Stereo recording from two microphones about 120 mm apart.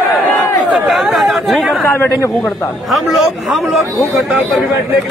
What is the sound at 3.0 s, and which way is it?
Speech, centre (ahead or behind).